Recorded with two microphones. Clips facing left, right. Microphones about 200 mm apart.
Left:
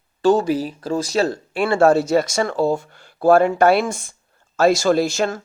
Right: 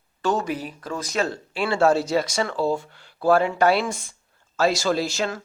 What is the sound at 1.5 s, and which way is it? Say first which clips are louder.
Speech: left 4 dB; 50° left (ahead or behind).